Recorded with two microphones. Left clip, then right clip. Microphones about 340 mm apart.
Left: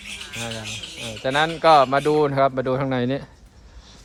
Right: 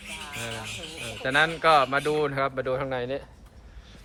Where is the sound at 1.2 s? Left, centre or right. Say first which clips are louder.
Left 4 dB; centre.